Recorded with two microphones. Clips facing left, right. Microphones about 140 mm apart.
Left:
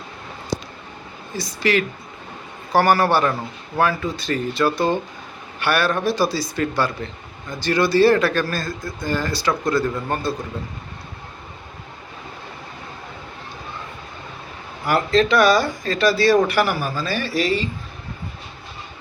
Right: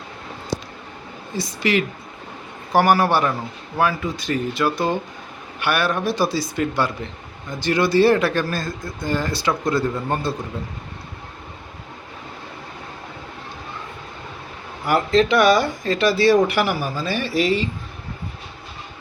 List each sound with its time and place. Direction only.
1.4 s speech: 20° right (ahead or behind)
15.1 s speech: 20° right (ahead or behind)